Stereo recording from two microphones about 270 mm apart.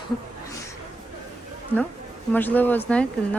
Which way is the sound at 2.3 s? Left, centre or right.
Centre.